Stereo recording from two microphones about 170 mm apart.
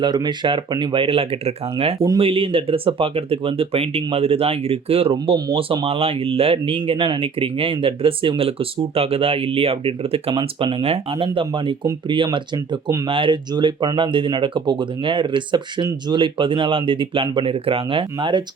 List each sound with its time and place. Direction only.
0.0 s speech: 25° right (ahead or behind)